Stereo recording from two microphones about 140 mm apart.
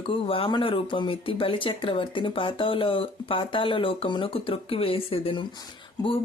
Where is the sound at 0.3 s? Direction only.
35° left (ahead or behind).